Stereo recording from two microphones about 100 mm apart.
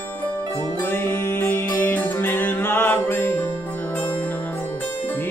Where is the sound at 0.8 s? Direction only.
20° left (ahead or behind).